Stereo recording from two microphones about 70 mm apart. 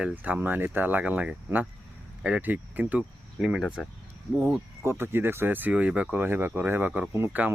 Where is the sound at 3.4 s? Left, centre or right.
Centre.